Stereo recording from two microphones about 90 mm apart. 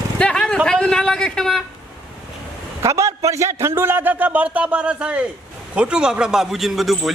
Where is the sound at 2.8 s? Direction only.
35° right (ahead or behind).